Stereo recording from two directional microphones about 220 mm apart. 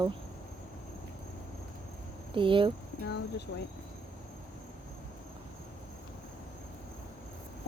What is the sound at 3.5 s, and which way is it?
Speech, 60° left (ahead or behind).